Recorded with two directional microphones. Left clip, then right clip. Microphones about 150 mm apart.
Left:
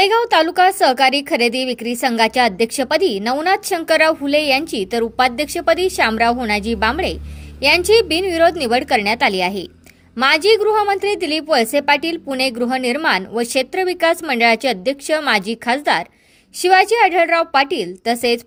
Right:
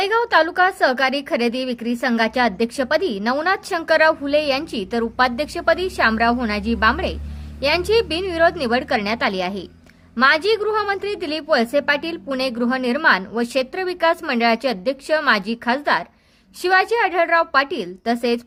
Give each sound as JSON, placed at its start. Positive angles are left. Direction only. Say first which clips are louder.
{"t": 0.0, "sound": "a woman's voice", "louder": "left 3 dB", "side_deg": 20}